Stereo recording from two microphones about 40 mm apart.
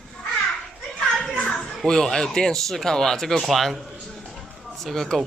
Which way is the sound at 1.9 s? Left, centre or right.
Centre.